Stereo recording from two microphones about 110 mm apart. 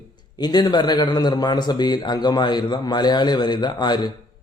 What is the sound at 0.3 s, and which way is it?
A man's voice, 40° left (ahead or behind).